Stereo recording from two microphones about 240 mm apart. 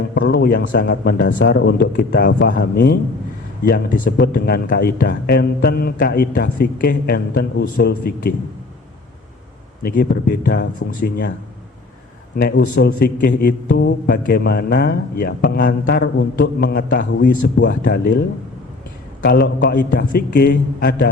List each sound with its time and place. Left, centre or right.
0.1 s a man's voice: left
9.8 s a man's voice: left
12.4 s a man's voice: left